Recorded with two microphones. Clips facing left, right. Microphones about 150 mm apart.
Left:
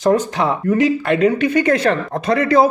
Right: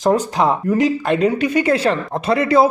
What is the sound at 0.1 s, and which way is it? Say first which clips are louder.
Speech: even; 35° right (ahead or behind).